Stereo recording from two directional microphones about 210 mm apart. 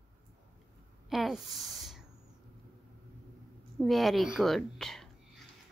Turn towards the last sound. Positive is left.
turn(degrees=0)  # may be behind; listen again after turning